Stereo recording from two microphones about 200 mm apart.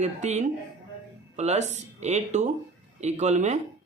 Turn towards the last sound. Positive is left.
turn(degrees=-35)  # may be behind; listen again after turning